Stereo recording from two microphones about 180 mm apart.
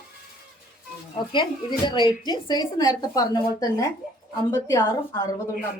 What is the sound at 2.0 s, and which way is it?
A woman's voice, 25° left (ahead or behind).